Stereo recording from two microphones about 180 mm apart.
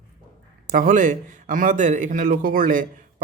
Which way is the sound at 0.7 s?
50° right (ahead or behind).